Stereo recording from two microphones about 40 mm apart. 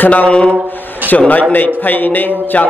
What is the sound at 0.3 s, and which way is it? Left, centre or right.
Speech, left.